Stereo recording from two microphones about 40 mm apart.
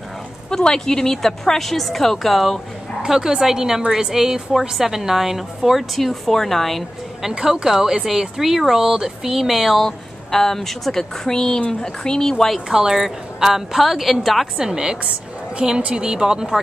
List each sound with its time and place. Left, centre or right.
0.5 s a woman's voice: centre
3.0 s a woman's voice: centre
7.3 s speech: centre
9.8 s a woman's voice: centre
12.6 s a woman's voice: centre
14.6 s speech: centre
15.8 s speech: right
16.1 s speech: centre